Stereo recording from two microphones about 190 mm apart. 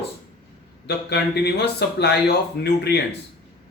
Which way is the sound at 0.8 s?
60° left (ahead or behind).